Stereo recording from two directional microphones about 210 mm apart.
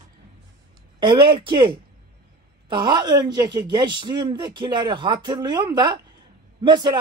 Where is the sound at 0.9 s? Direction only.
20° right (ahead or behind).